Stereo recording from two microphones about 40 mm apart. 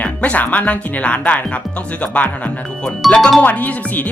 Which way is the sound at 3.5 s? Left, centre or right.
Left.